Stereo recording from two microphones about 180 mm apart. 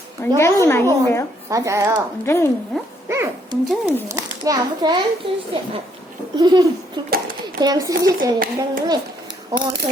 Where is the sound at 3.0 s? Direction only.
15° right (ahead or behind).